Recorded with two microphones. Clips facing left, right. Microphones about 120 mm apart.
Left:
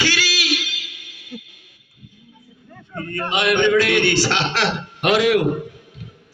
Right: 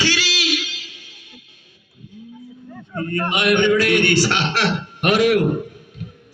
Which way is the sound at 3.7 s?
45° right (ahead or behind).